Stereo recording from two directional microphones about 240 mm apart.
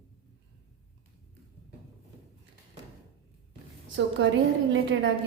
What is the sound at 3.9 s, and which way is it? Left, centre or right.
A woman's voice, right.